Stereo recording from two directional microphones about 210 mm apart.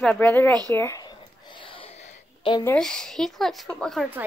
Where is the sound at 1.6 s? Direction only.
25° left (ahead or behind).